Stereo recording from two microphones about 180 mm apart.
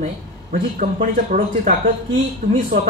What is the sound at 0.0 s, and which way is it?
Speech, 50° right (ahead or behind).